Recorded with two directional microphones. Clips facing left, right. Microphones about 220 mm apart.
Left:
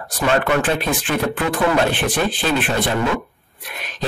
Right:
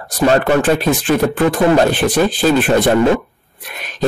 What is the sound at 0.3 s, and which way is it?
Speech, 40° right (ahead or behind).